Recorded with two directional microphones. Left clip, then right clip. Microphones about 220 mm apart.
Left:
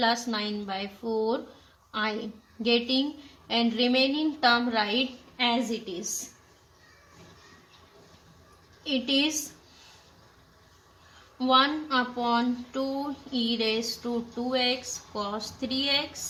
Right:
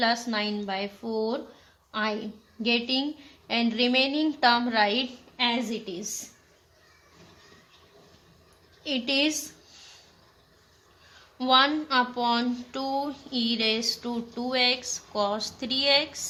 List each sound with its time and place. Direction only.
0.0 s a woman's voice: 25° right (ahead or behind)
8.8 s speech: 30° right (ahead or behind)
11.3 s speech: 30° right (ahead or behind)